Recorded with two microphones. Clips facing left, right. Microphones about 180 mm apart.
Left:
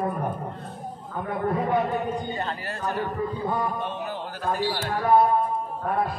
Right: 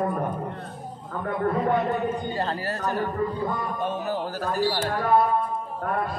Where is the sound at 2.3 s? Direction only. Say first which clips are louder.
Right 3 dB; 35° right (ahead or behind).